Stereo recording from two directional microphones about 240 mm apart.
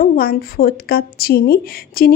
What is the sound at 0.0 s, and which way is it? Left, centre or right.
Speech, left.